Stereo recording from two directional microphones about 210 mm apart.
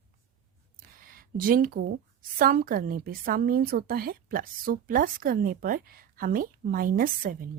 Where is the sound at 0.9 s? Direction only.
40° right (ahead or behind).